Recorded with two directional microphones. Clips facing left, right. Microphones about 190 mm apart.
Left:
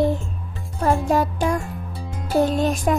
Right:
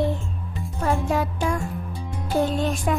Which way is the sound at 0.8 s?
40° left (ahead or behind).